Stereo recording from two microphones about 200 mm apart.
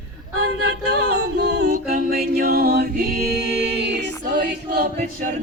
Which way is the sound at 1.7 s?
45° right (ahead or behind).